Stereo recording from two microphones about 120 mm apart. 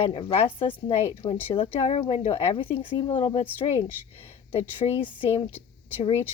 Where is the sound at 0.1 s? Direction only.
50° left (ahead or behind).